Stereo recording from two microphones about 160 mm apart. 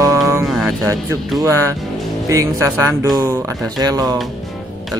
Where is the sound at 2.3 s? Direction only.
20° right (ahead or behind).